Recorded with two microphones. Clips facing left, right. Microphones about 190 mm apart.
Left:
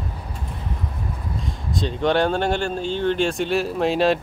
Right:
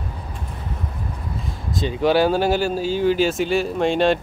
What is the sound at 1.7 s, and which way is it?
Speech, 5° right (ahead or behind).